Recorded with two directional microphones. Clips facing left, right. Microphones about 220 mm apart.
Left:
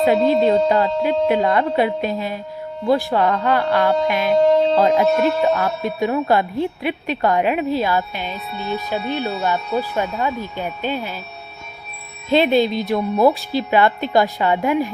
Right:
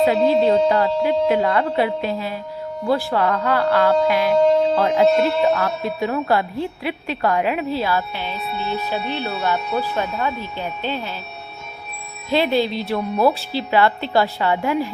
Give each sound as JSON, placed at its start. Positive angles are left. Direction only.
{"t": 0.1, "sound": "a woman's voice", "side_deg": 15}
{"t": 12.3, "sound": "a woman's voice", "side_deg": 20}